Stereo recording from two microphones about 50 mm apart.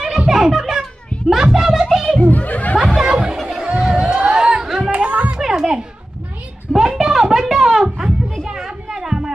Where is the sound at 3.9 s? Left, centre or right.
Centre.